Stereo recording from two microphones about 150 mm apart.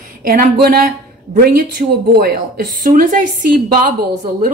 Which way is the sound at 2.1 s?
85° right.